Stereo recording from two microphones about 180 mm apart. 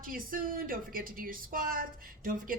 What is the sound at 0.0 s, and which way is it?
A woman's voice, 50° right (ahead or behind).